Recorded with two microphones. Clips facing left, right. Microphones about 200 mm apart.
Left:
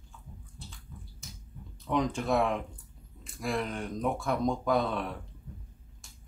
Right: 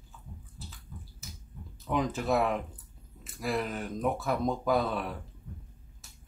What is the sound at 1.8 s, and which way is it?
Speech, centre (ahead or behind).